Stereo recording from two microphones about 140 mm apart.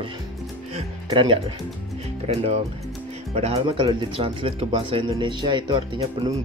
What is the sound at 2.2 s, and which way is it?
Speech, 45° right (ahead or behind).